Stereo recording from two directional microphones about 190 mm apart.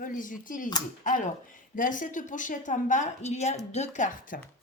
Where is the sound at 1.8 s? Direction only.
45° left (ahead or behind).